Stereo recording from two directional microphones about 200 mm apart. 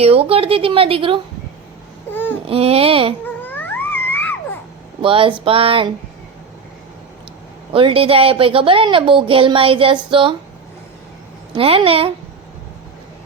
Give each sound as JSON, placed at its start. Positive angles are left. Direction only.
{"t": 0.0, "sound": "a woman's voice", "side_deg": -30}
{"t": 2.0, "sound": "babbling", "side_deg": 10}
{"t": 2.5, "sound": "a woman's voice", "side_deg": -30}
{"t": 3.4, "sound": "a sound", "side_deg": 10}
{"t": 5.0, "sound": "a woman's voice", "side_deg": -25}
{"t": 7.7, "sound": "a woman's voice", "side_deg": -25}
{"t": 11.5, "sound": "a woman's voice", "side_deg": -25}